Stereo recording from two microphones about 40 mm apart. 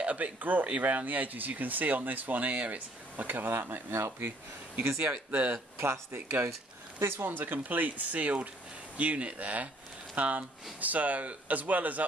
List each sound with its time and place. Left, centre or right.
0.0 s speech: right
3.9 s speech: right
5.1 s speech: right
5.8 s speech: right
7.0 s speech: right